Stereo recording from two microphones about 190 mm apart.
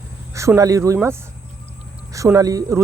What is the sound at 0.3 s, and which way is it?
Speech, 15° right (ahead or behind).